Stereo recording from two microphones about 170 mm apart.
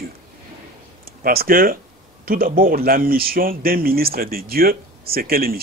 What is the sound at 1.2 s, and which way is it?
Speech, 60° right (ahead or behind).